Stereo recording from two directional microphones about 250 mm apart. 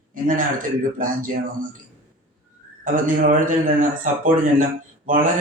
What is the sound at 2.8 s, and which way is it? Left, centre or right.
Speech, right.